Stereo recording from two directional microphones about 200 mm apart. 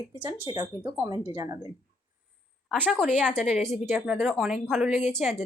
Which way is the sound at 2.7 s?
5° left (ahead or behind).